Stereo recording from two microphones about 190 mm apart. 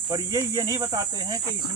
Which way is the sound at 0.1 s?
20° right (ahead or behind).